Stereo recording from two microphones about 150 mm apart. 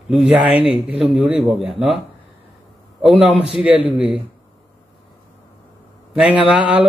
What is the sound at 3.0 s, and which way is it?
Speech, centre (ahead or behind).